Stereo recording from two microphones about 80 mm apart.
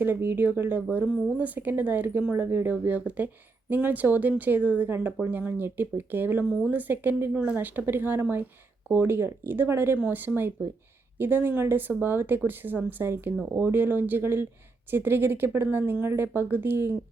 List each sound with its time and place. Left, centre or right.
0.0 s speech: right
6.5 s speech: centre
6.7 s speech: right